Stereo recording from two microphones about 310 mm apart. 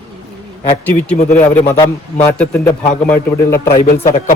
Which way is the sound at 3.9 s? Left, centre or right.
Left.